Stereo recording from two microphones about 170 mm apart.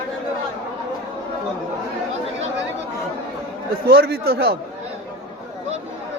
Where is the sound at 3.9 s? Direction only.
70° right (ahead or behind).